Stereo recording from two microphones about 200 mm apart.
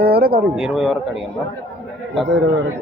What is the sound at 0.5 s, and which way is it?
Speech, 5° right (ahead or behind).